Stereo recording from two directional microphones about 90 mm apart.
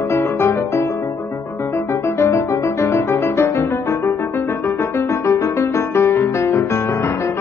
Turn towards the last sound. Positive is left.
turn(degrees=30)  # may be behind; listen again after turning